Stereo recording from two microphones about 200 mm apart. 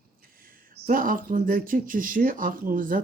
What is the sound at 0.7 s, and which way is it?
Speech, 45° right (ahead or behind).